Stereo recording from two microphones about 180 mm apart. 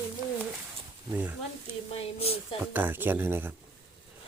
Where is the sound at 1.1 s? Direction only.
10° right (ahead or behind).